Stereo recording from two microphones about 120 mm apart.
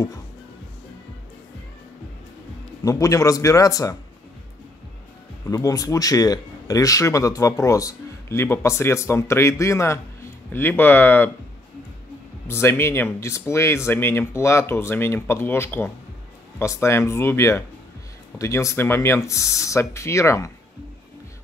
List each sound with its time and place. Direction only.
2.8 s speech: 25° left (ahead or behind)
5.5 s speech: 30° left (ahead or behind)
12.4 s speech: 20° left (ahead or behind)